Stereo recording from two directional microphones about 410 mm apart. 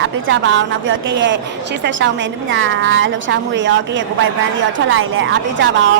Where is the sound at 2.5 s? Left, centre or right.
Right.